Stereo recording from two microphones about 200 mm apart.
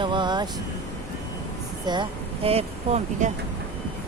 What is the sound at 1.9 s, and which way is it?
Speech, 25° right (ahead or behind).